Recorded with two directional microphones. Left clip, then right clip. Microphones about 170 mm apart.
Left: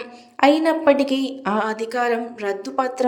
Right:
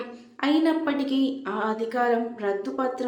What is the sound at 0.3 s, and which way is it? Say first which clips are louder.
A woman's voice: left 7 dB; 45° left (ahead or behind).